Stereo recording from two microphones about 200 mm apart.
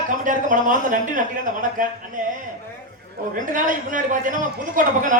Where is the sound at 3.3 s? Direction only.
40° right (ahead or behind).